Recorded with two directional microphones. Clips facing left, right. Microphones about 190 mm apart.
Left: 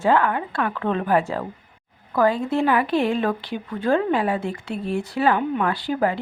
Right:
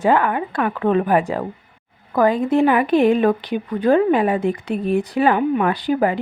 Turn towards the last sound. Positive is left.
turn(degrees=-15)  # may be behind; listen again after turning